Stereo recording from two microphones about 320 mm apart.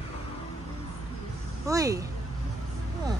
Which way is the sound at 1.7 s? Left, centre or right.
Centre.